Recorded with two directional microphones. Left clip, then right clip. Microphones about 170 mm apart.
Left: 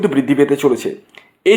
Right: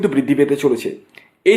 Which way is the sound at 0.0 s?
Centre (ahead or behind).